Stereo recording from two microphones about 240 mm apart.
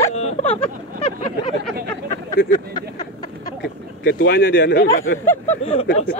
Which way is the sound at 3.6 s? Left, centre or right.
Left.